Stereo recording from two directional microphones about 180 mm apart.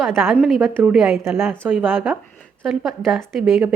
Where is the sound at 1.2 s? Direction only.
15° right (ahead or behind).